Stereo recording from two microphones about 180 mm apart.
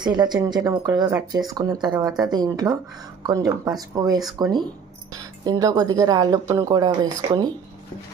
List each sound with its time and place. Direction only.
0.0 s speech: 25° right (ahead or behind)